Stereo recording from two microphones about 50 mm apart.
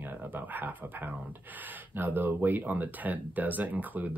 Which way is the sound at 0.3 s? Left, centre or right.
Right.